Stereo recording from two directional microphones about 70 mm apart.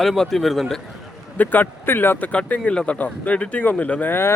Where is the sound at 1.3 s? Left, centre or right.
Left.